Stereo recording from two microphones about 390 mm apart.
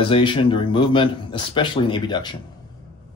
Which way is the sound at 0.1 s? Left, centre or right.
Centre.